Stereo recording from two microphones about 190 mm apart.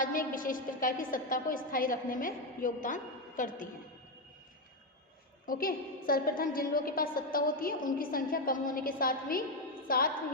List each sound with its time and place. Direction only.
0.0 s a woman's voice: 45° left (ahead or behind)
5.5 s a woman's voice: 50° left (ahead or behind)